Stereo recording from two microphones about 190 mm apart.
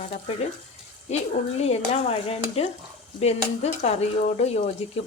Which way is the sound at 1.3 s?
35° left (ahead or behind).